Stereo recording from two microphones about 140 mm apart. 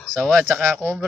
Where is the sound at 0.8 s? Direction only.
15° right (ahead or behind).